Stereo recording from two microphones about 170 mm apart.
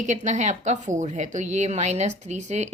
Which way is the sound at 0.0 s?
45° right (ahead or behind).